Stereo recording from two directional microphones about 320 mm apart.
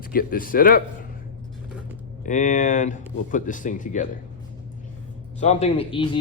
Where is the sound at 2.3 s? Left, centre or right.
Left.